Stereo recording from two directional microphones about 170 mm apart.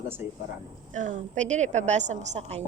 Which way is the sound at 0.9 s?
45° right (ahead or behind).